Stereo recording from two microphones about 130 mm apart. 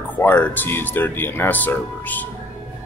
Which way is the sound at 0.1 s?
15° left (ahead or behind).